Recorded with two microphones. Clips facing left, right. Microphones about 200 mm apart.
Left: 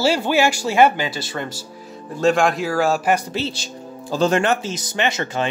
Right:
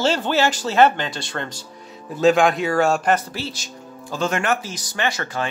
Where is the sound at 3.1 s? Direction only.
20° left (ahead or behind).